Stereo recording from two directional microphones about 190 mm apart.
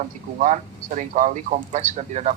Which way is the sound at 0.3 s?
40° right (ahead or behind).